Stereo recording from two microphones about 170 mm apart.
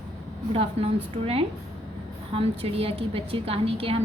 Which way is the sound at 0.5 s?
35° right (ahead or behind).